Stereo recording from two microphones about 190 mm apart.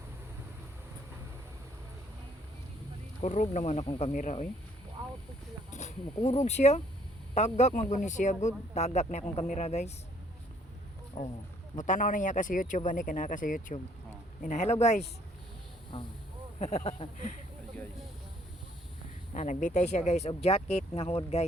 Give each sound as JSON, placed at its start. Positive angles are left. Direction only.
{"t": 3.2, "sound": "speech", "side_deg": 35}
{"t": 5.7, "sound": "speech", "side_deg": 40}
{"t": 11.2, "sound": "speech", "side_deg": 45}
{"t": 16.6, "sound": "speech", "side_deg": 35}
{"t": 19.3, "sound": "speech", "side_deg": 40}